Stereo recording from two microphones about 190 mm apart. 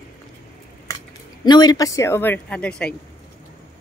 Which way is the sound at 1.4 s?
20° left (ahead or behind).